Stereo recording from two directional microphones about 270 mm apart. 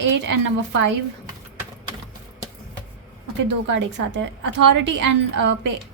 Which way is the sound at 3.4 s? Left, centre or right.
Right.